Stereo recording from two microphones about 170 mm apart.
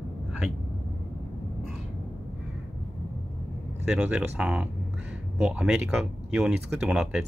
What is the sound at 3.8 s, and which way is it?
Speech, 5° right (ahead or behind).